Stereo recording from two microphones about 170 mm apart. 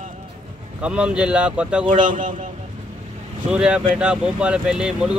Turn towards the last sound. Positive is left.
turn(degrees=-5)  # may be behind; listen again after turning